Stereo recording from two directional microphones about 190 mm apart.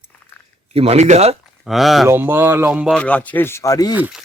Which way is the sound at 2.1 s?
10° right (ahead or behind).